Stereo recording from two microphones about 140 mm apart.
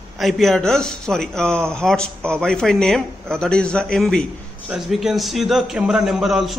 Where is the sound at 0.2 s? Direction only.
Centre (ahead or behind).